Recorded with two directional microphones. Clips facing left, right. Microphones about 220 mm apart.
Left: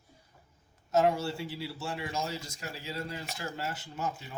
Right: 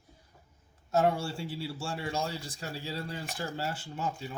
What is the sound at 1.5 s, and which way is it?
Speech, 30° right (ahead or behind).